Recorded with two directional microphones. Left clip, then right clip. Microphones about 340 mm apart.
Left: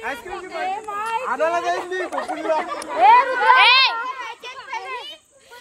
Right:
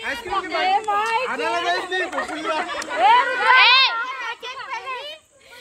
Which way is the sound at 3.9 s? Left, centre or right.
Left.